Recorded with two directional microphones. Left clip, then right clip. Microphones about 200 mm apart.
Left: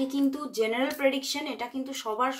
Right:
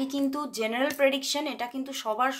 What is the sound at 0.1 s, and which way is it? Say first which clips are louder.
A woman's voice: left 1 dB; 30° right (ahead or behind).